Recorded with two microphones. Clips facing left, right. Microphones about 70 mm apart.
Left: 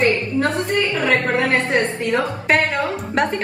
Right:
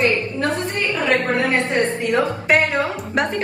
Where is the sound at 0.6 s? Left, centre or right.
Left.